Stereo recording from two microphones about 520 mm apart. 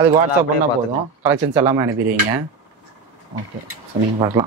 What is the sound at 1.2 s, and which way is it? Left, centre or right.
Speech, centre.